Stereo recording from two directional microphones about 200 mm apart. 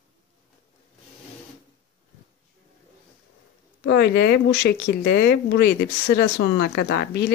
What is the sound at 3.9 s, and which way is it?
Speech, 55° left (ahead or behind).